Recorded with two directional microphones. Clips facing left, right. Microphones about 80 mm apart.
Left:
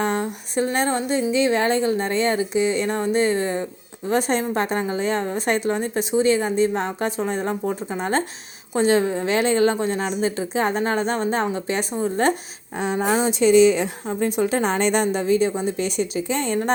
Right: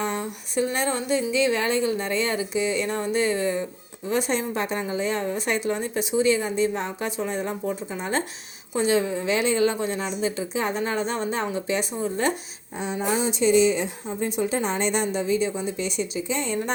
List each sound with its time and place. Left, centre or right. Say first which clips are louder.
0.0 s a woman's voice: left 5 dB; left
12.7 s a woman's voice: left 5 dB; left
13.4 s a woman's voice: left 5 dB; left